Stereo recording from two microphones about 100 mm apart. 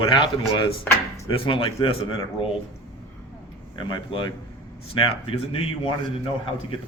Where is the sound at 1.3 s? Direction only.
60° left (ahead or behind).